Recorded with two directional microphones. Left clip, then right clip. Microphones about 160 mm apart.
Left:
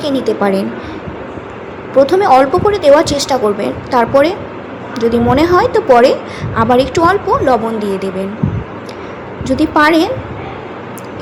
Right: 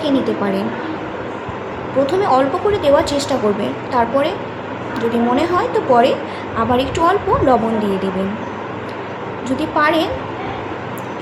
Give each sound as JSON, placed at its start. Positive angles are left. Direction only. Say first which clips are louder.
{"t": 0.0, "sound": "speech", "louder": "left 4 dB", "side_deg": 50}
{"t": 2.0, "sound": "speech", "louder": "left 4 dB", "side_deg": 45}
{"t": 9.6, "sound": "speech", "louder": "left 6 dB", "side_deg": 45}